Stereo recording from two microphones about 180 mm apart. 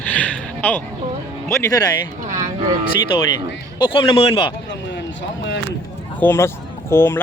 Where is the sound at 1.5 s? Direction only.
20° left (ahead or behind).